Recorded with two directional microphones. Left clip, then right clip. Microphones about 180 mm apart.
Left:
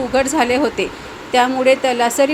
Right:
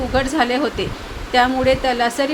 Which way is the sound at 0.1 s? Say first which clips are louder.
Left 2 dB; 5° left (ahead or behind).